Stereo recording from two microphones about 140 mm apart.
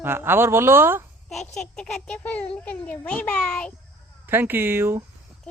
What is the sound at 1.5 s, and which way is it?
A child's voice, 5° left (ahead or behind).